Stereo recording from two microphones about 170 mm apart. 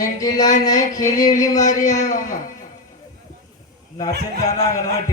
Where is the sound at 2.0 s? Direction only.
50° left (ahead or behind).